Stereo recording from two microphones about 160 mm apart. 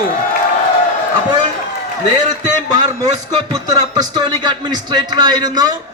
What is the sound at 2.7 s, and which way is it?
Speech, 25° right (ahead or behind).